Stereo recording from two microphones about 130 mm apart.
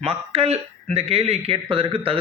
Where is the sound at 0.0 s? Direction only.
50° right (ahead or behind).